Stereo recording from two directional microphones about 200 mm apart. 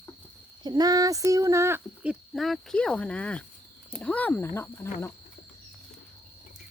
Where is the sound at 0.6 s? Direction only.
20° right (ahead or behind).